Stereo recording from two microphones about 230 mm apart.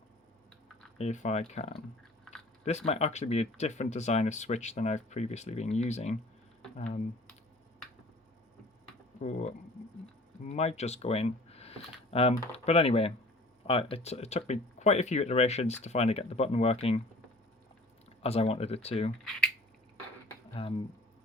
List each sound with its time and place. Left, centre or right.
0.9 s speech: left
10.4 s speech: left
18.2 s speech: left
20.5 s speech: left